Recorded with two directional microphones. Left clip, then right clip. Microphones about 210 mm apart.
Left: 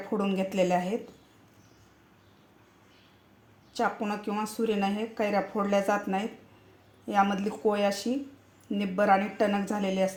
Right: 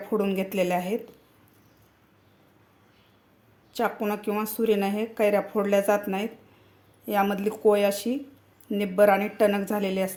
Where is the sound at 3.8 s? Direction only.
20° right (ahead or behind).